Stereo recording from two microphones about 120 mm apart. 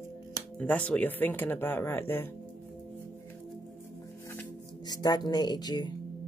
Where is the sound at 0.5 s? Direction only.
10° left (ahead or behind).